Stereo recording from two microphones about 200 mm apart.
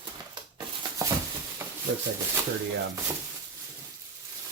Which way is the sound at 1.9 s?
65° right (ahead or behind).